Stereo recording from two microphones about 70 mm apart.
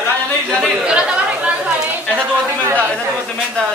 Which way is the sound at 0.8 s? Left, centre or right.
Centre.